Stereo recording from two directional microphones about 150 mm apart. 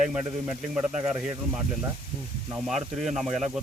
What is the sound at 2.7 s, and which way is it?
Speech, centre (ahead or behind).